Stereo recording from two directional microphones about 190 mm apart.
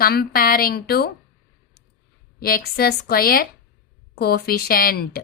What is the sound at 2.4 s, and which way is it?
A woman's voice, 50° left (ahead or behind).